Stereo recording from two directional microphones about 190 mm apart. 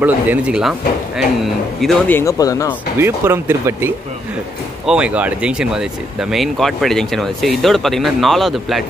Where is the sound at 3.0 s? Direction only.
10° right (ahead or behind).